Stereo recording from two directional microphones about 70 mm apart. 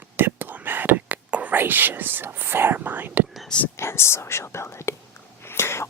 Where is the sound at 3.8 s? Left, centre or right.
Left.